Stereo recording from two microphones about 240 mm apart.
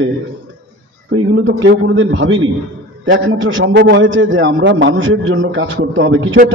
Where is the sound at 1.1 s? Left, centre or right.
Right.